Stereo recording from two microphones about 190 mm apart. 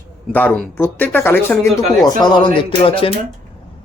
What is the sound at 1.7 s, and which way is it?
Speech, 20° left (ahead or behind).